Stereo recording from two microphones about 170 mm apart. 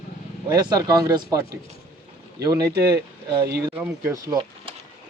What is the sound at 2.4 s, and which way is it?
Speech, 20° right (ahead or behind).